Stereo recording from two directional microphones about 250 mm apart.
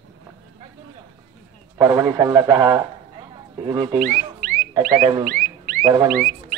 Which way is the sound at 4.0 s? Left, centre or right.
Right.